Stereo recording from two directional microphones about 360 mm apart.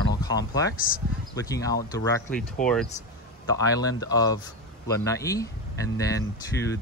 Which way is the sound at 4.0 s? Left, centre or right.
Centre.